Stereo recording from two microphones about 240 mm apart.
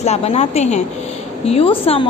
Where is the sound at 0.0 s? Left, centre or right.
Left.